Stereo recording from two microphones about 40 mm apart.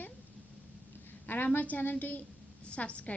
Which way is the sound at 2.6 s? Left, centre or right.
Left.